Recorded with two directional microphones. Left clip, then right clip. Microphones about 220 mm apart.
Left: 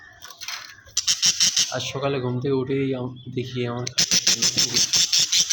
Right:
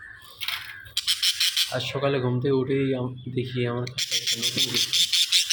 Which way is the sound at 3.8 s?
40° left (ahead or behind).